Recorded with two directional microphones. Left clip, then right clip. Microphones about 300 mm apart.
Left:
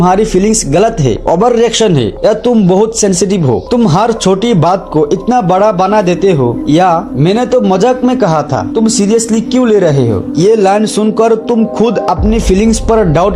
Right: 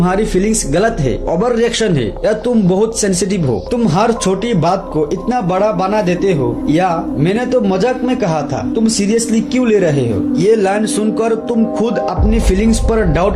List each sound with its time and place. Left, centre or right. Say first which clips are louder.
0.0 s a man's voice: left 6 dB; centre